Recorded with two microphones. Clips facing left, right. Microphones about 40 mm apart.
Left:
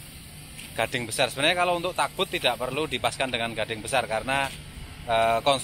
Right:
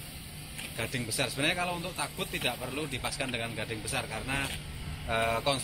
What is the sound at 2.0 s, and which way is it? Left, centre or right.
Speech, left.